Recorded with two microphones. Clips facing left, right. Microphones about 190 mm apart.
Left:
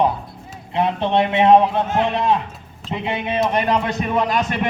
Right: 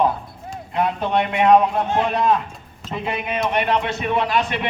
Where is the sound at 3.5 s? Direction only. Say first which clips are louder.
Left 1 dB; 40° left (ahead or behind).